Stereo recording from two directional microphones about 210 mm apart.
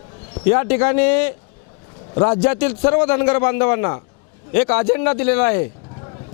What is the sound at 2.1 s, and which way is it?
A man's voice, 25° left (ahead or behind).